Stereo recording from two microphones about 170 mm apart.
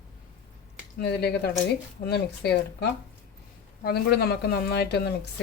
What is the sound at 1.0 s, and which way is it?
Speech, 70° left (ahead or behind).